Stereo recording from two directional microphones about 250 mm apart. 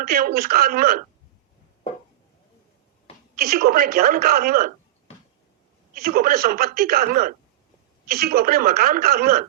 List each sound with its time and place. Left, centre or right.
0.0 s speech: right
3.3 s speech: right
5.9 s speech: right